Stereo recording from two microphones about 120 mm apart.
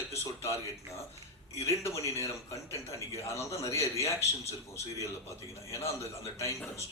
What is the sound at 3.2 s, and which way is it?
Speech, 25° left (ahead or behind).